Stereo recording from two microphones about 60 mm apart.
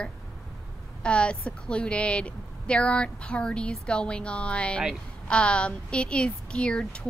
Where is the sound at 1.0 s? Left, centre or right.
Centre.